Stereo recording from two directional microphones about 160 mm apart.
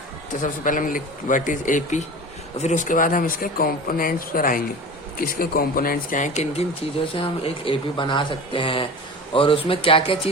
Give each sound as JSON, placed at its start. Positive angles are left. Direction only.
{"t": 0.4, "sound": "speech", "side_deg": 55}